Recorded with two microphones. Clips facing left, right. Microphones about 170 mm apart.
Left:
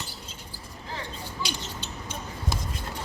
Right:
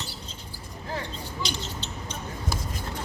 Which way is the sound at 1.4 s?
10° left (ahead or behind).